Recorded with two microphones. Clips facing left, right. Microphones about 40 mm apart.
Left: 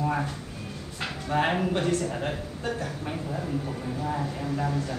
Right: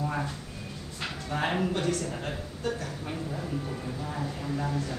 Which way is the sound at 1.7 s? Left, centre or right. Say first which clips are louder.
Left 3 dB; left.